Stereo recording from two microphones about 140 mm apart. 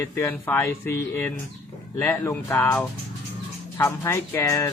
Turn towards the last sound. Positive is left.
turn(degrees=20)  # may be behind; listen again after turning